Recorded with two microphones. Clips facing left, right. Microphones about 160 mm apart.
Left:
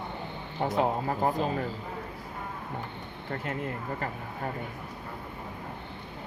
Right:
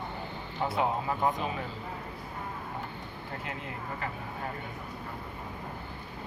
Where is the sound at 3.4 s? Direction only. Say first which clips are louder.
Left 6 dB; 45° left (ahead or behind).